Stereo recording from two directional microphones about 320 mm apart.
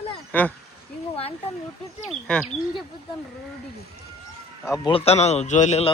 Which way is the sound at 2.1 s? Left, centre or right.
Centre.